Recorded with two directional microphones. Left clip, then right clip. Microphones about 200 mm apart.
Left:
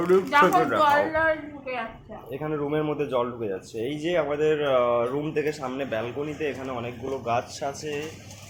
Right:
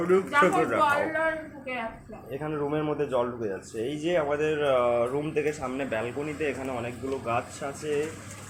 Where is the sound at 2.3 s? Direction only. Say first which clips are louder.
Left 2 dB; 15° left (ahead or behind).